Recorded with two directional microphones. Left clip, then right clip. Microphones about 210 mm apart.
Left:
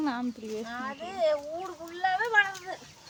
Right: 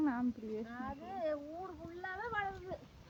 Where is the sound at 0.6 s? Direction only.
55° left (ahead or behind).